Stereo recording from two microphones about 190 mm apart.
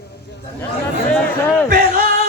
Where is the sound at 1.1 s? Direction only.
10° left (ahead or behind).